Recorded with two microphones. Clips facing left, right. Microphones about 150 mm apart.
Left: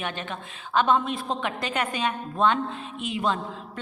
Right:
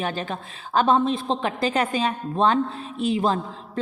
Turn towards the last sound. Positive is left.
turn(degrees=-35)  # may be behind; listen again after turning